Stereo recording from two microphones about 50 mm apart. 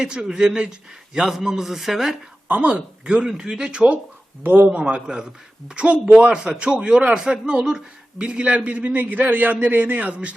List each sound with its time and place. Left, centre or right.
0.0 s a man's voice: centre
2.5 s a man's voice: right
3.0 s a man's voice: centre
4.4 s a man's voice: right
4.7 s a man's voice: right